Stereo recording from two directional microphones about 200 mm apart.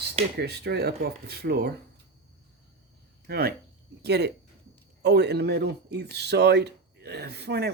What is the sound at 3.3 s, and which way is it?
Speech, 50° right (ahead or behind).